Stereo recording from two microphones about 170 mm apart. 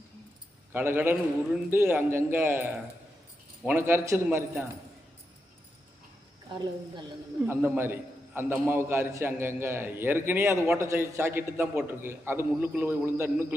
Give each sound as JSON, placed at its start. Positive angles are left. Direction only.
{"t": 0.7, "sound": "a man's voice", "side_deg": -10}
{"t": 6.5, "sound": "a woman's voice", "side_deg": -25}
{"t": 7.5, "sound": "a man's voice", "side_deg": -15}